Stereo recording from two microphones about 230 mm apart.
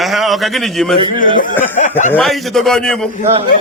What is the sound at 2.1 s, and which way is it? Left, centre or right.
Speech, centre.